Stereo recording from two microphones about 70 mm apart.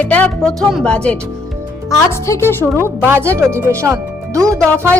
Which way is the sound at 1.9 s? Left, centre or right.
Left.